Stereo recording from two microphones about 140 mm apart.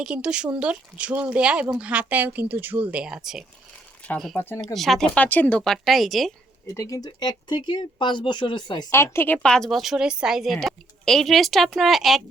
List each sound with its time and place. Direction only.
0.0 s speech: 5° right (ahead or behind)
4.0 s speech: 10° left (ahead or behind)
4.6 s speech: centre (ahead or behind)
6.7 s speech: 25° left (ahead or behind)
8.9 s speech: 20° left (ahead or behind); by 12.2 s centre (ahead or behind)